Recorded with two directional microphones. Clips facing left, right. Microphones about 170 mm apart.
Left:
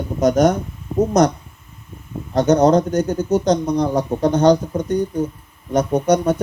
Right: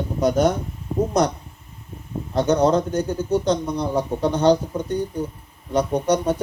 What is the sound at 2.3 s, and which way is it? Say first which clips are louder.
Speech: left 4 dB; 40° left (ahead or behind).